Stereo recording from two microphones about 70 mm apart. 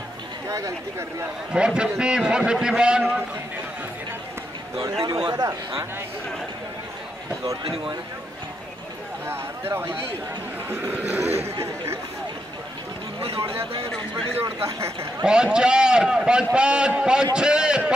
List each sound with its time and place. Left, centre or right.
0.5 s speech: right
1.5 s a man's voice: centre
4.7 s speech: right
9.3 s speech: right
14.6 s speech: right
15.2 s a man's voice: centre